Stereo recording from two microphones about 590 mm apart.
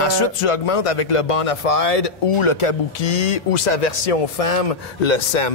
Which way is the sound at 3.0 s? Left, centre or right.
Left.